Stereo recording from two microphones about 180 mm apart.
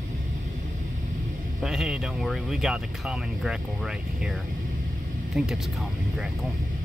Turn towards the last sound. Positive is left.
turn(degrees=0)  # may be behind; listen again after turning